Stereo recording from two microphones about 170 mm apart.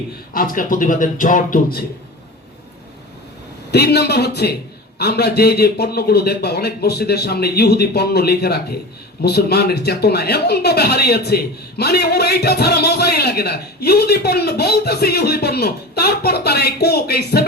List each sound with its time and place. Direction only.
0.3 s speech: 55° left (ahead or behind)
3.7 s speech: 70° left (ahead or behind)